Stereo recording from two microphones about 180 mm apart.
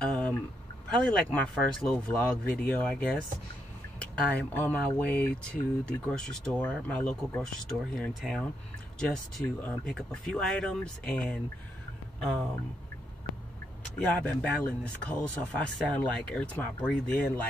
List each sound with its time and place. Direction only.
0.0 s a sound: 5° left (ahead or behind)
0.8 s speech: 5° left (ahead or behind)
13.9 s speech: 10° left (ahead or behind)